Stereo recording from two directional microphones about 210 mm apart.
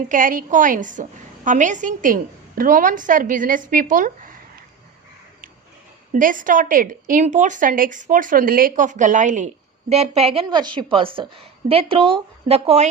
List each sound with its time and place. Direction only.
0.1 s a woman's voice: 40° right (ahead or behind)
6.1 s a woman's voice: 40° right (ahead or behind)